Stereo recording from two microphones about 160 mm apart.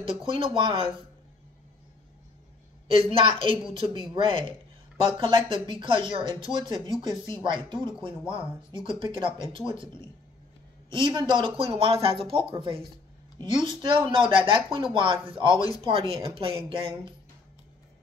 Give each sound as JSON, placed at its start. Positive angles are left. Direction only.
{"t": 0.0, "sound": "speech", "side_deg": -35}
{"t": 2.9, "sound": "speech", "side_deg": -35}